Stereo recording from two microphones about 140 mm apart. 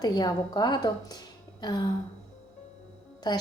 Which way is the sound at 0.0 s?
30° left (ahead or behind).